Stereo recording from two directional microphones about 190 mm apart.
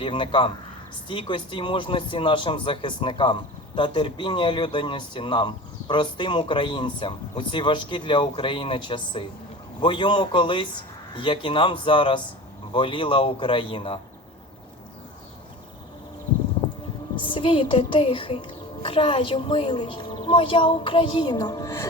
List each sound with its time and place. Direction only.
0.0 s a man's voice: 25° left (ahead or behind)
17.2 s a man's voice: 25° left (ahead or behind)